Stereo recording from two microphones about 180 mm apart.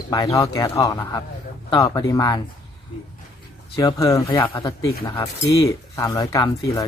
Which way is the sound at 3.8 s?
20° left (ahead or behind).